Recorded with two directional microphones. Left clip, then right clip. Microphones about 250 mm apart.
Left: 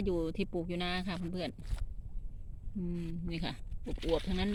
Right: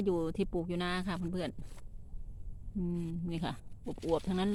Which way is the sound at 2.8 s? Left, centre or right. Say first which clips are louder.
Right 2 dB; centre.